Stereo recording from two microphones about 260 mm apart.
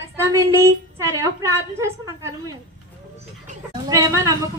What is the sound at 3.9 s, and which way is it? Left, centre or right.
Speech, centre.